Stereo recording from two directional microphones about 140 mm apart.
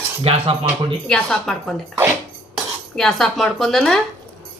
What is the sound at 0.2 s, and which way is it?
Speech, 45° right (ahead or behind).